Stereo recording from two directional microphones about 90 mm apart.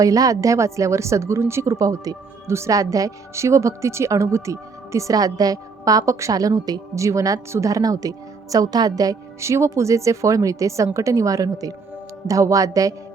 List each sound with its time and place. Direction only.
0.0 s a woman's voice: 40° right (ahead or behind)